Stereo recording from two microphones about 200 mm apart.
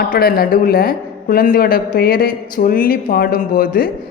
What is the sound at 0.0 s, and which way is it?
A man's voice, 50° left (ahead or behind).